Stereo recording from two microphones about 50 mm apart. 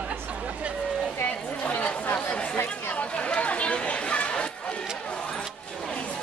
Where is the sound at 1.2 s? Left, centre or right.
Left.